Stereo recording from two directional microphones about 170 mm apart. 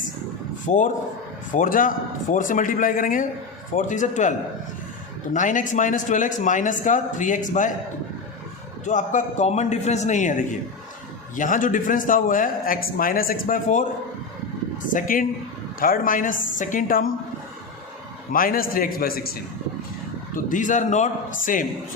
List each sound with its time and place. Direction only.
0.6 s a man's voice: 50° left (ahead or behind)
8.8 s a man's voice: 45° left (ahead or behind)
14.9 s a man's voice: 55° left (ahead or behind)
18.3 s a man's voice: 55° left (ahead or behind)
20.3 s a man's voice: 50° left (ahead or behind)